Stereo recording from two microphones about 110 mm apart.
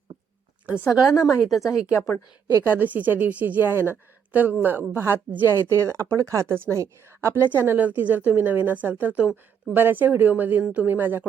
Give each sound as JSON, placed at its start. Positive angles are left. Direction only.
{"t": 0.6, "sound": "a woman's voice", "side_deg": -5}
{"t": 1.1, "sound": "a woman's voice", "side_deg": 30}
{"t": 2.6, "sound": "a woman's voice", "side_deg": -15}